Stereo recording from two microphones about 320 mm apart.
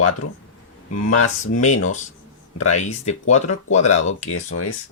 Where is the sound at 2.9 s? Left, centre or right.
Left.